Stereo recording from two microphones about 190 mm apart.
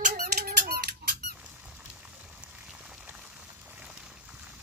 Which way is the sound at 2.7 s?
5° right (ahead or behind).